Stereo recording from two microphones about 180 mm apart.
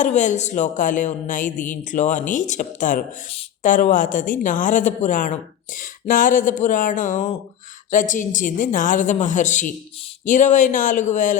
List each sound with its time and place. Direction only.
0.0 s a woman's voice: 40° left (ahead or behind)